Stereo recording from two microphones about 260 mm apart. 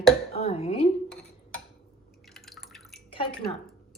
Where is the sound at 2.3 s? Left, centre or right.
Centre.